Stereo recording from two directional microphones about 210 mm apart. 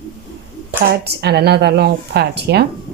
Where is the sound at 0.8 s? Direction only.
50° right (ahead or behind).